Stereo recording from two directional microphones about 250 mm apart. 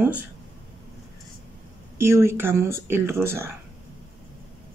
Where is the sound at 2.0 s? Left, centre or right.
Centre.